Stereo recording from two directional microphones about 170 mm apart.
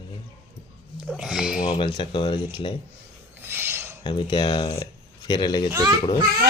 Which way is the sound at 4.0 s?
30° left (ahead or behind).